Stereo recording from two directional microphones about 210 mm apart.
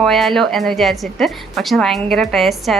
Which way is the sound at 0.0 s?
Centre (ahead or behind).